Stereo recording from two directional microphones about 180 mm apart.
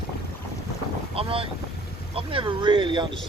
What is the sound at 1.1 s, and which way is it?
Speech, 30° right (ahead or behind).